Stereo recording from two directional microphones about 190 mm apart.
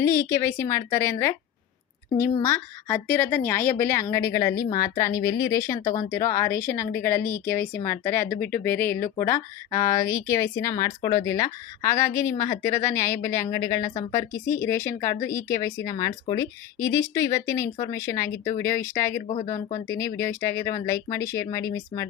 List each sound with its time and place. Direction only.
0.0 s speech: 15° left (ahead or behind)
2.4 s speech: 10° left (ahead or behind)